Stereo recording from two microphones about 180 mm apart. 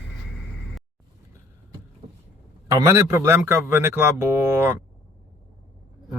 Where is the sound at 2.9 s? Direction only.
15° right (ahead or behind).